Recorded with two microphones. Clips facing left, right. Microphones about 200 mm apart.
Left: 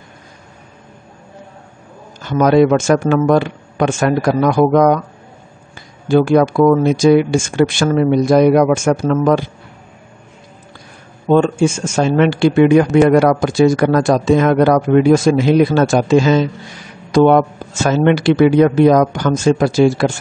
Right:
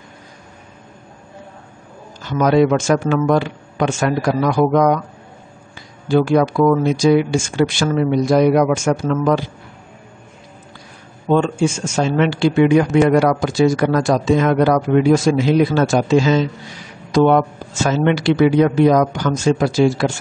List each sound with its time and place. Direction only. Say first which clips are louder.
2.2 s a man's voice: left 3 dB; 50° left (ahead or behind)
6.0 s a man's voice: left 3 dB; 50° left (ahead or behind)
11.2 s a man's voice: left 4 dB; 50° left (ahead or behind)